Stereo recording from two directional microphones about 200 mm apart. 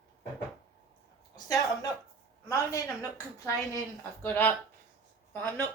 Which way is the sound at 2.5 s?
15° left (ahead or behind).